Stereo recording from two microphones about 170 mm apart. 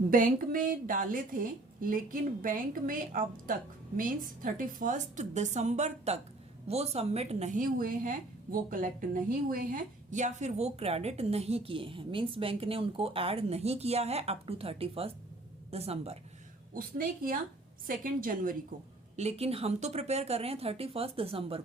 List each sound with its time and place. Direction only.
0.1 s a woman's voice: 55° right (ahead or behind); by 16.1 s 35° right (ahead or behind)
16.7 s a woman's voice: 55° right (ahead or behind)
19.1 s a woman's voice: 40° right (ahead or behind)